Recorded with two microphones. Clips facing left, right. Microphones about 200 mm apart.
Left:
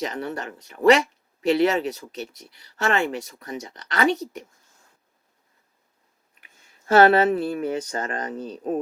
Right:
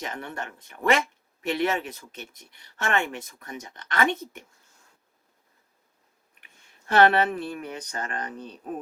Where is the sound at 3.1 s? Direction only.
35° left (ahead or behind).